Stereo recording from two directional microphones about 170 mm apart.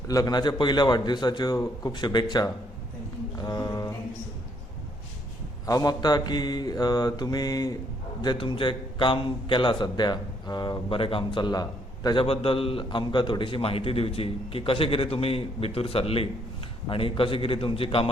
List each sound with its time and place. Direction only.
0.1 s a man's voice: 20° left (ahead or behind)
3.3 s a sound: 20° left (ahead or behind)
5.6 s a man's voice: 20° left (ahead or behind)